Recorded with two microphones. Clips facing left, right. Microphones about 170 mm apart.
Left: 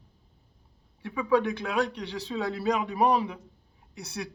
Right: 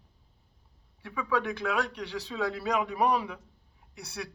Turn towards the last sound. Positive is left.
turn(degrees=20)  # may be behind; listen again after turning